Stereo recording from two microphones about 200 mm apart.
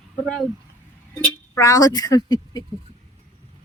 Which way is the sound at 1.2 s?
15° left (ahead or behind).